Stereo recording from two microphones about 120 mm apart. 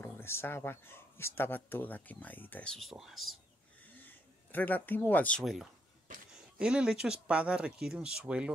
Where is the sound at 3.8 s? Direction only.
15° left (ahead or behind).